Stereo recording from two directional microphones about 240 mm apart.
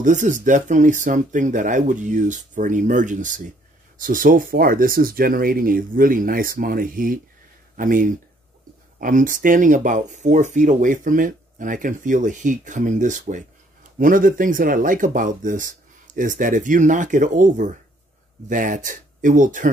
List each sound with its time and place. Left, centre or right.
0.0 s speech: right